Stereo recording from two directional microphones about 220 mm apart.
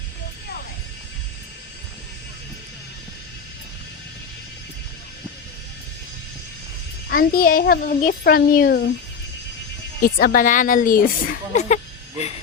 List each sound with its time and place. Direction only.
7.1 s a child's voice: 45° left (ahead or behind)
10.2 s a woman's voice: 40° left (ahead or behind)